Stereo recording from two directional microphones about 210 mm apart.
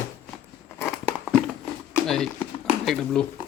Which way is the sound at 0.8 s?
Centre (ahead or behind).